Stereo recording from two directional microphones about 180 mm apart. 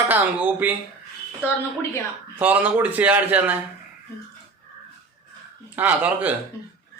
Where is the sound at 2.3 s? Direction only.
10° right (ahead or behind).